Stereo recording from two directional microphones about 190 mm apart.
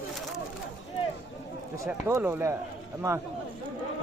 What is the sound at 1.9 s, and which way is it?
Speech, 10° right (ahead or behind).